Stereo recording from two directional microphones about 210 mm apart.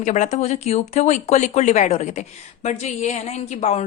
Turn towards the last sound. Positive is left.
turn(degrees=30)  # may be behind; listen again after turning